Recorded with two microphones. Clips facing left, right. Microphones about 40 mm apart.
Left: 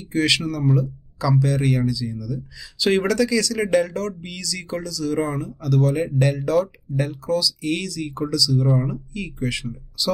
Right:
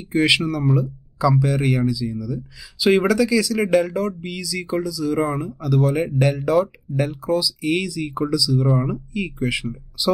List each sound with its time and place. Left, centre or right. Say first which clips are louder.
0.0 s speech: right 3 dB; centre